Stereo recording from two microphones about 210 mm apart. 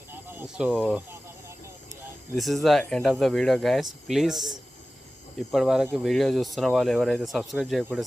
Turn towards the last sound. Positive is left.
turn(degrees=0)  # may be behind; listen again after turning